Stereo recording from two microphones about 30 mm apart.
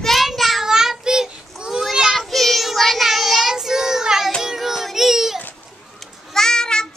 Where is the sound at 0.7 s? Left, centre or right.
Centre.